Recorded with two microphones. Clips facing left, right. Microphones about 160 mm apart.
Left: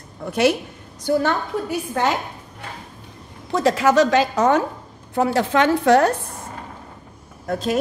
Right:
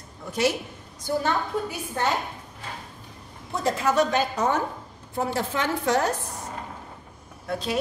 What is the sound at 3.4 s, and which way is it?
A woman's voice, 90° left.